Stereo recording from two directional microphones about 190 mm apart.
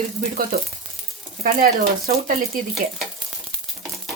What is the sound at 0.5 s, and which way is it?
Speech, 50° right (ahead or behind).